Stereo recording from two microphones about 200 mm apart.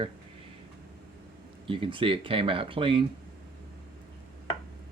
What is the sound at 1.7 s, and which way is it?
Speech, 25° right (ahead or behind).